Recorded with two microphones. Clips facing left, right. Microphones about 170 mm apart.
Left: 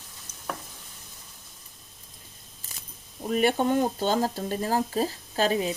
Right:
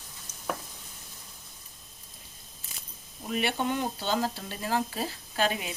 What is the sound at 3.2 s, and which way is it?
Speech, 40° left (ahead or behind).